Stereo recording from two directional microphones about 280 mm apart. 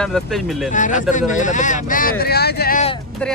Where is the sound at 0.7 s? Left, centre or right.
Left.